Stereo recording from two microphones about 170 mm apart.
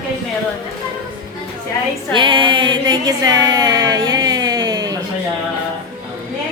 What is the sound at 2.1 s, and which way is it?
Music, 30° right (ahead or behind).